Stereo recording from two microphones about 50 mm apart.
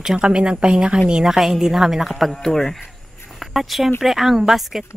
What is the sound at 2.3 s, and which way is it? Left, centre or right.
Speech, centre.